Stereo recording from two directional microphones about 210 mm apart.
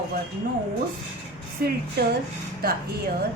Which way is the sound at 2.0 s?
50° right (ahead or behind).